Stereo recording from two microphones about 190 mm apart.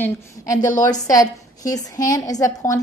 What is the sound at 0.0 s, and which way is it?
A woman's voice, 20° left (ahead or behind).